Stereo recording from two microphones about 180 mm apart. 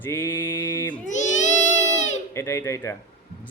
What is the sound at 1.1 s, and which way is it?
Speech, 40° left (ahead or behind).